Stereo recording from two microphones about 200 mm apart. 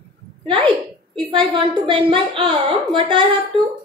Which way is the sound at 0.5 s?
25° right (ahead or behind).